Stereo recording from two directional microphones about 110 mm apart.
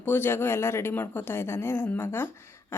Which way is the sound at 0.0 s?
20° left (ahead or behind).